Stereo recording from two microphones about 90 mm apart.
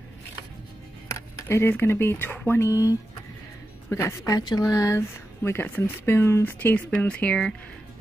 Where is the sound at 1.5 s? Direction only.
25° left (ahead or behind).